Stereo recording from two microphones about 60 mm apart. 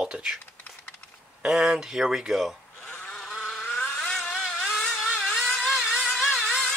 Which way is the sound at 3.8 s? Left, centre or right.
Centre.